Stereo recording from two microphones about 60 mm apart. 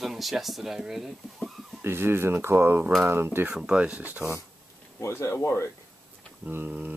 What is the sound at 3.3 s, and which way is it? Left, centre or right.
Speech, right.